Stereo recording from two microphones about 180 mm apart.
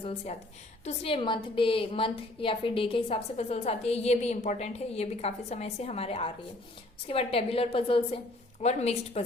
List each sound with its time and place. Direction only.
0.0 s a woman's voice: 35° left (ahead or behind)